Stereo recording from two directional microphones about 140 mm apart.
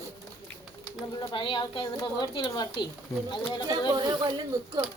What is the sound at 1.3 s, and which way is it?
A woman's voice, 35° left (ahead or behind).